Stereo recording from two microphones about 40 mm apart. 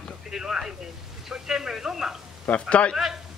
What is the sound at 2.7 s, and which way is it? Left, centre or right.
Speech, left.